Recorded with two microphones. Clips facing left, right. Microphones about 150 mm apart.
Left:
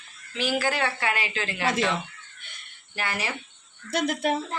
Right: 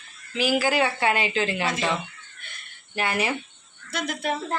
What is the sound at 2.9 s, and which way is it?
Speech, 20° right (ahead or behind).